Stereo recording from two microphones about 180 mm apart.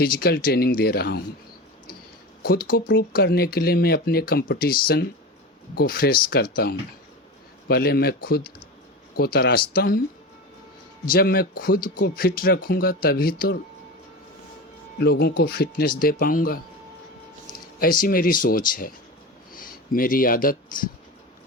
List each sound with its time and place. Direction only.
0.0 s speech: 60° left (ahead or behind)
2.4 s speech: 55° left (ahead or behind)
11.1 s speech: 55° left (ahead or behind)
14.9 s speech: 65° left (ahead or behind)
18.0 s speech: 50° left (ahead or behind)